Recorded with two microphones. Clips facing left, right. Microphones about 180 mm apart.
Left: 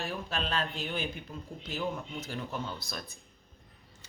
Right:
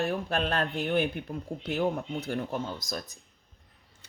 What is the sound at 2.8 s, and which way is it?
Speech, 40° right (ahead or behind).